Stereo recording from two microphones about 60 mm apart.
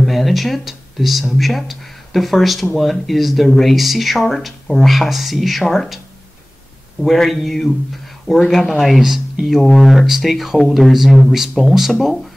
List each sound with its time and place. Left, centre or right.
0.0 s speech: centre
7.0 s speech: centre